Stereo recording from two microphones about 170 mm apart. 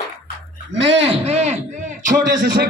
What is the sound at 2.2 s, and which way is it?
Speech, 70° right (ahead or behind).